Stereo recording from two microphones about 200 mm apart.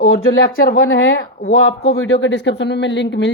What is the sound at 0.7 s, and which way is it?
Speech, 75° left (ahead or behind).